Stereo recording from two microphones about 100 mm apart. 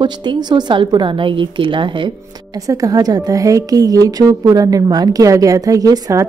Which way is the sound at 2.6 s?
40° right (ahead or behind).